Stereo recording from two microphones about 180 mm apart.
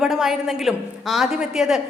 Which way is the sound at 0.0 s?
Centre (ahead or behind).